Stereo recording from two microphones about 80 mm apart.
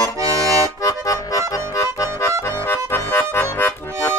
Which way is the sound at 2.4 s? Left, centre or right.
Left.